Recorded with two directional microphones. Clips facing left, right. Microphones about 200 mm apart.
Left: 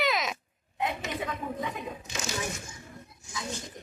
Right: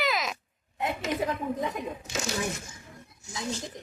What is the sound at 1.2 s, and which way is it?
Speech, 40° right (ahead or behind).